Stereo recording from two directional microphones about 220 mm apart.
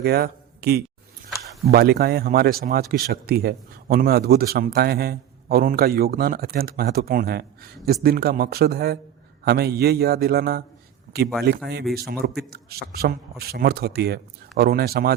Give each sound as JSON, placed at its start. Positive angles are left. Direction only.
{"t": 0.0, "sound": "a man's voice", "side_deg": -45}